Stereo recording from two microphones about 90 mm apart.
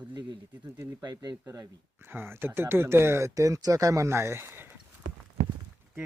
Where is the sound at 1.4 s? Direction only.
35° right (ahead or behind).